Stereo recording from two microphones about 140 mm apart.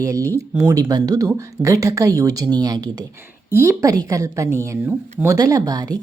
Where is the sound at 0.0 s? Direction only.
25° right (ahead or behind).